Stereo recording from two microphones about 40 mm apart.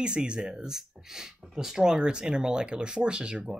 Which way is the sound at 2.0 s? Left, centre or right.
Right.